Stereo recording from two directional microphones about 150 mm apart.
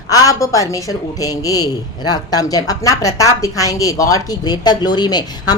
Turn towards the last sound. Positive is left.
turn(degrees=30)  # may be behind; listen again after turning